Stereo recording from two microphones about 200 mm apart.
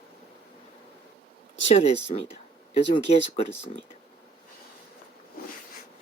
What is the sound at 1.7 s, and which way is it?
Speech, 30° left (ahead or behind).